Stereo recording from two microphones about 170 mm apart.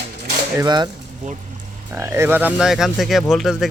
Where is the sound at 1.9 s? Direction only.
15° right (ahead or behind).